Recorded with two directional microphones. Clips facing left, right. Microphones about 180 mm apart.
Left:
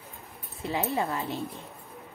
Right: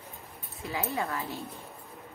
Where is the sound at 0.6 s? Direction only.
25° left (ahead or behind).